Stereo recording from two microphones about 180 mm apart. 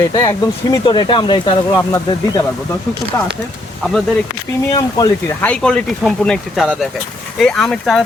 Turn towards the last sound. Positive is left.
turn(degrees=5)  # may be behind; listen again after turning